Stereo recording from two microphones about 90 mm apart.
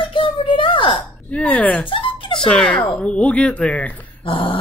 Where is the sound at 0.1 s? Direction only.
65° left (ahead or behind).